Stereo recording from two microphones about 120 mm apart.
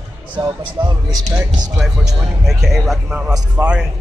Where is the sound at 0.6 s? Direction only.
40° right (ahead or behind).